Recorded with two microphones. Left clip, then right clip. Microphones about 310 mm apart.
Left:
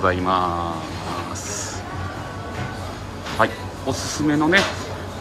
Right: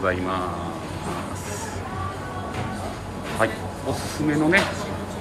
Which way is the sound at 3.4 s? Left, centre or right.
Centre.